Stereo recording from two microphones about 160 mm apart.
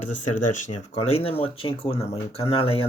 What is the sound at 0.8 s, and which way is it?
Speech, 40° left (ahead or behind).